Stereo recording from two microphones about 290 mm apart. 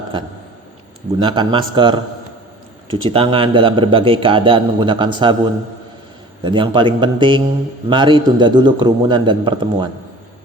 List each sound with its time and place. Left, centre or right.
0.1 s a man's voice: centre
6.4 s a man's voice: centre